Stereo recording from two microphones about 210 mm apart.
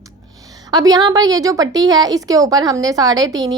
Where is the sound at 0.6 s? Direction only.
20° right (ahead or behind).